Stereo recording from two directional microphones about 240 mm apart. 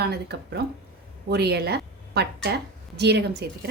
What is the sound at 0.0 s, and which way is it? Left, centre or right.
A woman's voice, right.